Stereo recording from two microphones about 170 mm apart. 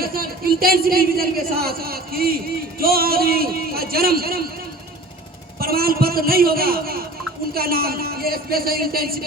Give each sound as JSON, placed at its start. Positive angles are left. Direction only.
{"t": 0.0, "sound": "a man's voice", "side_deg": -60}
{"t": 5.5, "sound": "a man's voice", "side_deg": -60}